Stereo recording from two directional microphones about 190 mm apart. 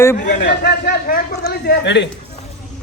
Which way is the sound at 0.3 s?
60° left (ahead or behind).